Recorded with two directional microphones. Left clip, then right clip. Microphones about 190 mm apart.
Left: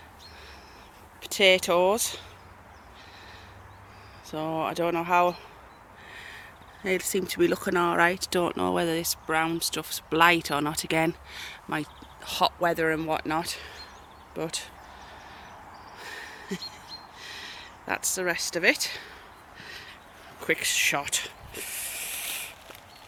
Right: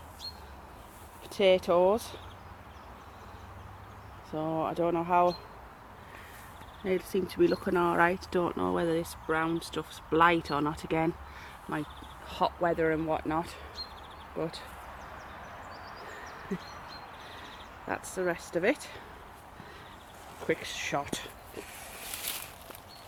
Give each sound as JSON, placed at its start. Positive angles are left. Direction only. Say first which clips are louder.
{"t": 1.4, "sound": "speech", "louder": "left 3 dB", "side_deg": 15}
{"t": 4.3, "sound": "speech", "louder": "left 2 dB", "side_deg": 15}
{"t": 6.8, "sound": "speech", "louder": "left 3 dB", "side_deg": 10}
{"t": 16.5, "sound": "speech", "louder": "left 3 dB", "side_deg": 15}
{"t": 17.4, "sound": "a sound", "louder": "left 3 dB", "side_deg": 15}
{"t": 18.5, "sound": "speech", "louder": "left 7 dB", "side_deg": 5}
{"t": 20.5, "sound": "speech", "louder": "left 7 dB", "side_deg": 15}